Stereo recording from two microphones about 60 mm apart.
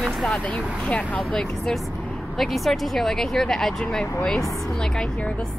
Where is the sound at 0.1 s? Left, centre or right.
Centre.